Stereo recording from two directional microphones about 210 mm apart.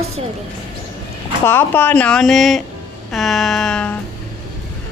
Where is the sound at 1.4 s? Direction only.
10° left (ahead or behind).